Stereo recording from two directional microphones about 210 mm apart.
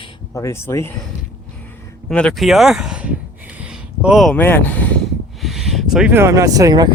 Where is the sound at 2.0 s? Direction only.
5° left (ahead or behind).